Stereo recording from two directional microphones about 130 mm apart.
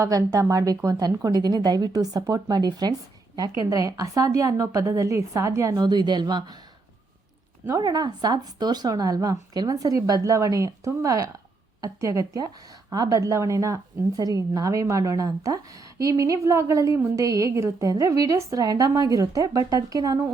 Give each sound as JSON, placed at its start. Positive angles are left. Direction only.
{"t": 0.0, "sound": "a woman's voice", "side_deg": -25}
{"t": 7.8, "sound": "a woman's voice", "side_deg": -30}